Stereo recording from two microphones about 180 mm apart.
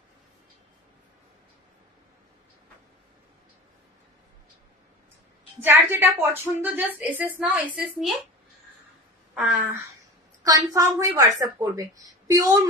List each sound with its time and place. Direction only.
5.6 s a woman's voice: 15° right (ahead or behind)
9.3 s speech: 5° right (ahead or behind)
10.4 s a woman's voice: 20° right (ahead or behind)